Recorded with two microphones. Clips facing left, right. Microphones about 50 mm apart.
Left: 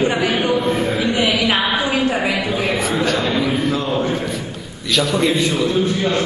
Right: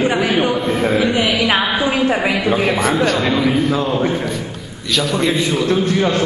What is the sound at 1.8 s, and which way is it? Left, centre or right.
Speech, right.